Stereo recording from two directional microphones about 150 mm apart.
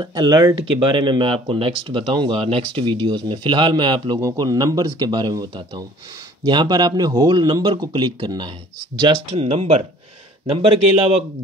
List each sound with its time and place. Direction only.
0.0 s speech: 25° right (ahead or behind)
4.2 s speech: 20° right (ahead or behind); by 11.1 s 40° right (ahead or behind)